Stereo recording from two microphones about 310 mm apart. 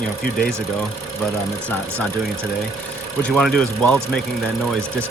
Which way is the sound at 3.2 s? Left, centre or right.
Centre.